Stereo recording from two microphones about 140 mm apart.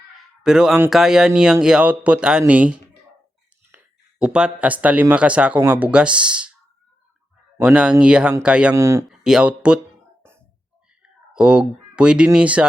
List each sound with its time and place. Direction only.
0.4 s speech: 5° right (ahead or behind)
7.6 s speech: 10° right (ahead or behind)
8.7 s speech: 20° right (ahead or behind)
9.0 s speech: 5° right (ahead or behind)
10.2 s music: 15° right (ahead or behind)
11.0 s speech: 5° right (ahead or behind)